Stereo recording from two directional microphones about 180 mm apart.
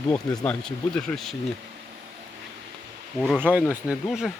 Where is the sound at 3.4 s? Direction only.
10° right (ahead or behind).